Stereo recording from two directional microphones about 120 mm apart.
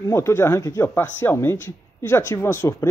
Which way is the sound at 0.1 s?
20° left (ahead or behind).